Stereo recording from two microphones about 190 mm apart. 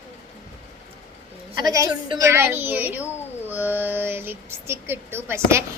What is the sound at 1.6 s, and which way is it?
Speech, 20° right (ahead or behind).